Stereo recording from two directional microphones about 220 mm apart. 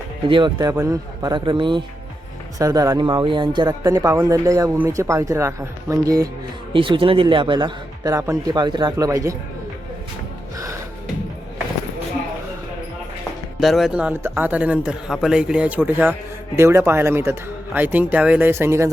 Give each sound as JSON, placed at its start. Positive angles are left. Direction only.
{"t": 0.3, "sound": "speech", "side_deg": -20}
{"t": 13.6, "sound": "speech", "side_deg": 0}